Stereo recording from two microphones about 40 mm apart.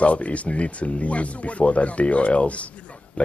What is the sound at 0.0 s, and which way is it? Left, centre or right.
Speech, left.